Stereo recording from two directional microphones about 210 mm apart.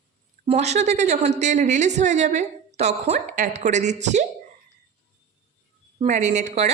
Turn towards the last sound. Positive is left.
turn(degrees=-35)  # may be behind; listen again after turning